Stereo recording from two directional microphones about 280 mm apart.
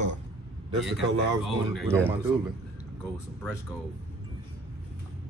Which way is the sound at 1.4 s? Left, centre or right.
Centre.